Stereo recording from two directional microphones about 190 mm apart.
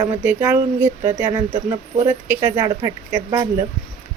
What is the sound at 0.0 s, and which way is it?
Speech, 10° right (ahead or behind).